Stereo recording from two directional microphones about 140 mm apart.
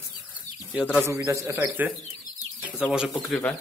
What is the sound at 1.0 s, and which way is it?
Speech, 20° right (ahead or behind).